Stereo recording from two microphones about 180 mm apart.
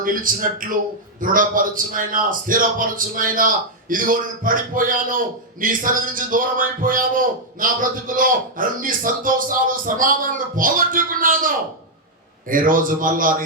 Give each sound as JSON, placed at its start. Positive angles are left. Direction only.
{"t": 0.0, "sound": "a man's voice", "side_deg": -50}